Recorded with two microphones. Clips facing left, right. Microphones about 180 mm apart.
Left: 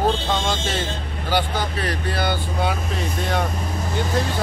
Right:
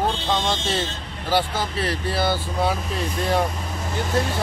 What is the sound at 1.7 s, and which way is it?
Speech, 30° right (ahead or behind).